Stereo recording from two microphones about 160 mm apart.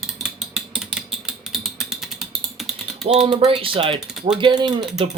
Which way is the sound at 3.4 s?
35° right (ahead or behind).